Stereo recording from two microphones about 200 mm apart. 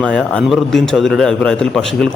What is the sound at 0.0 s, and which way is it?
Speech, 5° left (ahead or behind).